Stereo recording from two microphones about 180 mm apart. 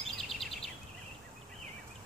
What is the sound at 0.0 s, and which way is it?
Bird vocalization, centre (ahead or behind).